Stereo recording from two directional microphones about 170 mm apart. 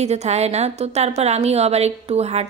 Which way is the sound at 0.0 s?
40° right (ahead or behind).